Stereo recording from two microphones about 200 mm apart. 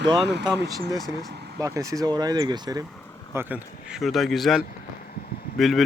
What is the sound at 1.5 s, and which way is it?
Speech, 15° right (ahead or behind).